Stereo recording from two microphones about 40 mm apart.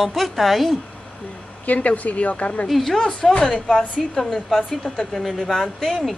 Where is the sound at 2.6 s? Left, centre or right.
Centre.